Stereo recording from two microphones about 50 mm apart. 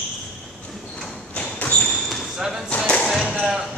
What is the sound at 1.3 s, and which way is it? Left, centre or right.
Basketball bounce, left.